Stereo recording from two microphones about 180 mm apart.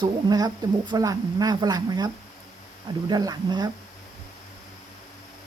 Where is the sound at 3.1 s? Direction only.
20° right (ahead or behind).